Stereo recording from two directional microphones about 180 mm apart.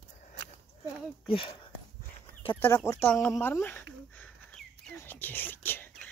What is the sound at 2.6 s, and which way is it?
Speech, 15° left (ahead or behind).